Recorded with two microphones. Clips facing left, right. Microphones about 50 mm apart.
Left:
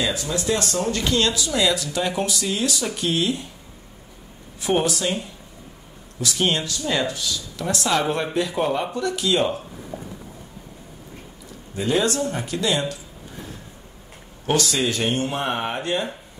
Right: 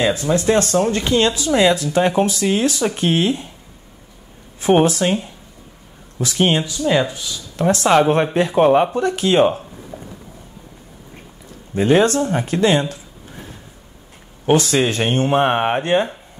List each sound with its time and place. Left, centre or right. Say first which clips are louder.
0.0 s speech: right 7 dB; right
4.6 s speech: right 7 dB; right
6.1 s speech: right 5 dB; right
6.5 s speech: right 7 dB; centre
7.5 s speech: right 9 dB; right
9.9 s a sound: left 1 dB; left
11.7 s speech: right 7 dB; right
14.4 s speech: right 6 dB; right